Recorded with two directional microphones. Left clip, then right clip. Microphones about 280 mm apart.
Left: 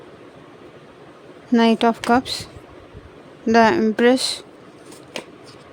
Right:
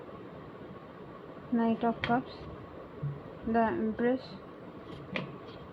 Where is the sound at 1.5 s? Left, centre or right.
Left.